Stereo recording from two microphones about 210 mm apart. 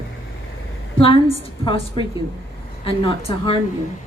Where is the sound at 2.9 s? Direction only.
25° left (ahead or behind).